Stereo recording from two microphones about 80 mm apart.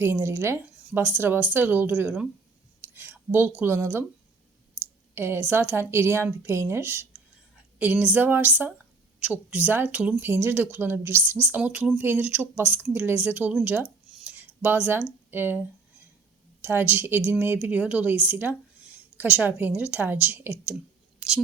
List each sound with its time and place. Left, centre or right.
0.0 s a woman's voice: right
2.8 s a sound: right
3.6 s a woman's voice: right
5.1 s a woman's voice: right
9.9 s speech: centre
10.2 s a woman's voice: right
14.6 s a woman's voice: right
16.6 s a woman's voice: right
21.2 s a sound: centre